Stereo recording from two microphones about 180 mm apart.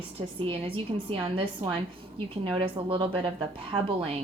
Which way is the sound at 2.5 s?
25° right (ahead or behind).